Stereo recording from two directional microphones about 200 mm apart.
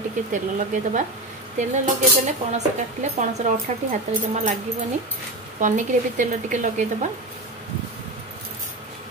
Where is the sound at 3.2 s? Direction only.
35° right (ahead or behind).